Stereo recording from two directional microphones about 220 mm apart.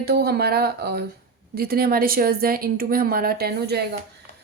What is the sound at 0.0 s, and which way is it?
Speech, 45° right (ahead or behind).